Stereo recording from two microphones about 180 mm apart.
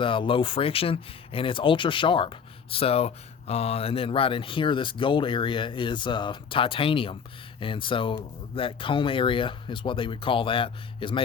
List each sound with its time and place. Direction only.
0.0 s speech: 30° left (ahead or behind)